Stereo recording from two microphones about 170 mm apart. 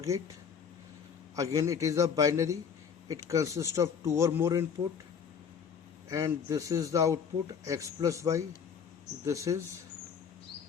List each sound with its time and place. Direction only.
1.4 s speech: 20° right (ahead or behind)
6.1 s speech: 20° right (ahead or behind)